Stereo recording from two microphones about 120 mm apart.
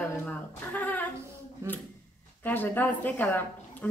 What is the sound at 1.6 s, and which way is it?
Speech, 25° right (ahead or behind).